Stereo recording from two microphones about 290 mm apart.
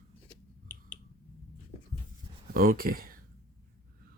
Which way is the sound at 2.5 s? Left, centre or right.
Right.